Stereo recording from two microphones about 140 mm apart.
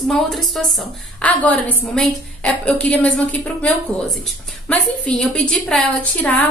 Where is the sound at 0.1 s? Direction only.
Centre (ahead or behind).